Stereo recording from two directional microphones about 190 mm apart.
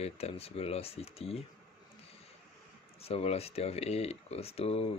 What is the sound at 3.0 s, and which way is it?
Speech, 30° left (ahead or behind).